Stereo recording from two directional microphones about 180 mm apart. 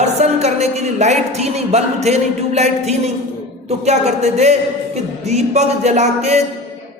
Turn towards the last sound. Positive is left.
turn(degrees=-40)  # may be behind; listen again after turning